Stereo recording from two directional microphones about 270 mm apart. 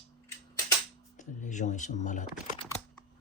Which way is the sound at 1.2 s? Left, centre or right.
Left.